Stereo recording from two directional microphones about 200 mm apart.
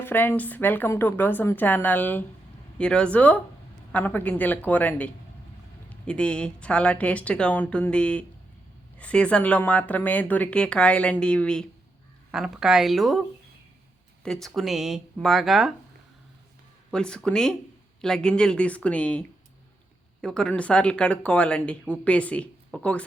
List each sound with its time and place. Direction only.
0.0 s speech: 10° left (ahead or behind)
14.3 s speech: centre (ahead or behind)
16.9 s speech: 5° left (ahead or behind)
20.2 s speech: 5° left (ahead or behind)